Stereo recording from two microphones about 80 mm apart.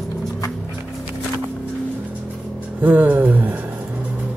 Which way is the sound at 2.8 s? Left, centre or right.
Right.